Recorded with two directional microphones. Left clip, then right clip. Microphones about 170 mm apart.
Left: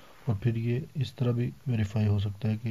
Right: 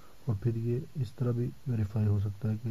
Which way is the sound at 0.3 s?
15° left (ahead or behind).